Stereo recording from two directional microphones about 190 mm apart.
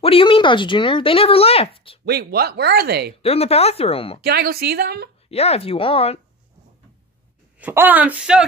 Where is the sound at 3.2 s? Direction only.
30° left (ahead or behind).